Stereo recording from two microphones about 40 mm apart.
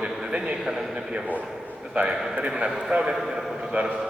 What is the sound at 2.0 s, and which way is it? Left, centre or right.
A man's voice, centre.